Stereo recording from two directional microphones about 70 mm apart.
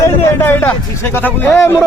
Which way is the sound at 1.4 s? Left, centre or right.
Left.